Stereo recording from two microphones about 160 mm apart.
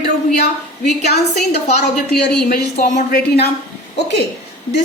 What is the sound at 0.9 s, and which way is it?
Speech, 45° left (ahead or behind).